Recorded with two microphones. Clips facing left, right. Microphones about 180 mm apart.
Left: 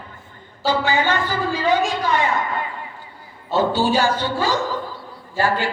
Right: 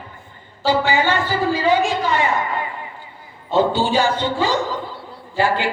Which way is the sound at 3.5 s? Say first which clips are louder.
Right 1 dB; 15° right (ahead or behind).